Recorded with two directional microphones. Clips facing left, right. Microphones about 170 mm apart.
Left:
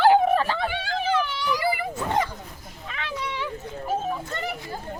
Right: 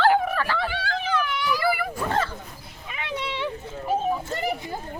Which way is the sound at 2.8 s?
15° right (ahead or behind).